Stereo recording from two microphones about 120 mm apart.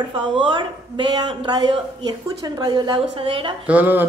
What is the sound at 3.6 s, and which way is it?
Speech, 15° right (ahead or behind).